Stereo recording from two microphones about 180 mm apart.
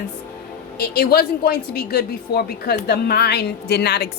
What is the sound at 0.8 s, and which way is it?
A woman's voice, 60° left (ahead or behind).